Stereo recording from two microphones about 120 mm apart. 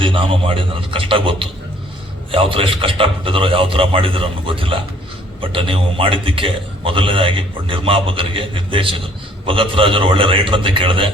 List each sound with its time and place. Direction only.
0.0 s a man's voice: 50° right (ahead or behind)